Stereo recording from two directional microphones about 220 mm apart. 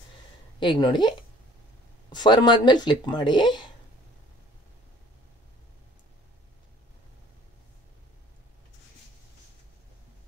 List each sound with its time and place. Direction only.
0.6 s speech: 20° left (ahead or behind)